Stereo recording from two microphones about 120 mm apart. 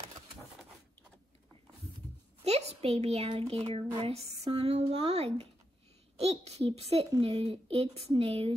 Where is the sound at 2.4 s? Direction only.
60° right (ahead or behind).